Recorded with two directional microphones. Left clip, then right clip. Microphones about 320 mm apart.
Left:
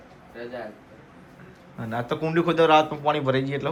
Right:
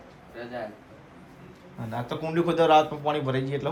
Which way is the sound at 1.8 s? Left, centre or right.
Centre.